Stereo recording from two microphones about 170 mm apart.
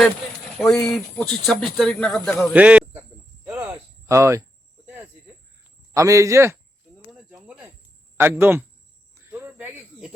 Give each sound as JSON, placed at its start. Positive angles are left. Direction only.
{"t": 0.6, "sound": "speech", "side_deg": 5}
{"t": 2.5, "sound": "a sound", "side_deg": -10}
{"t": 3.4, "sound": "speech", "side_deg": -15}
{"t": 5.9, "sound": "a man's voice", "side_deg": -20}
{"t": 7.4, "sound": "a sound", "side_deg": -10}
{"t": 9.1, "sound": "cricket", "side_deg": -15}